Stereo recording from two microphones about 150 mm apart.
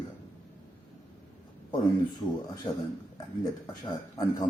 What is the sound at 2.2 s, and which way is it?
Speech, 25° left (ahead or behind).